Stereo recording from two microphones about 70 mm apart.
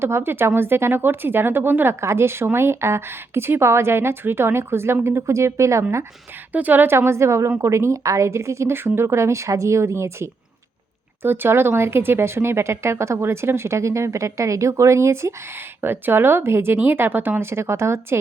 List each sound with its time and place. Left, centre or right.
0.0 s speech: right
6.5 s speech: right
15.8 s speech: right